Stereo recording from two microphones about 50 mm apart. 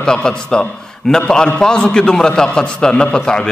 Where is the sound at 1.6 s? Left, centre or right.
Centre.